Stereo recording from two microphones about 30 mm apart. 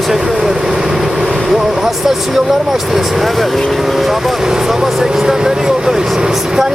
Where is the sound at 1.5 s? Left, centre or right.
Centre.